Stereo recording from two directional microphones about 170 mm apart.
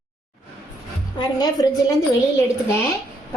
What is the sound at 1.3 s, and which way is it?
Speech, 25° left (ahead or behind).